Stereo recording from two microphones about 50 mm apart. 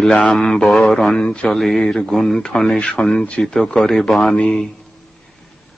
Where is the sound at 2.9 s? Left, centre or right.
Centre.